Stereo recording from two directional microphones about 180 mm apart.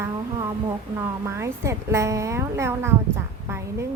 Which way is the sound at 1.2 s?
15° right (ahead or behind).